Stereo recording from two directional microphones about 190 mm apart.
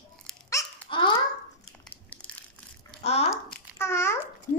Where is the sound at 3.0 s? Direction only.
35° left (ahead or behind).